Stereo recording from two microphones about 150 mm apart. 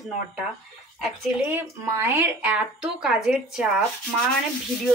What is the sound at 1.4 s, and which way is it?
Speech, 15° right (ahead or behind).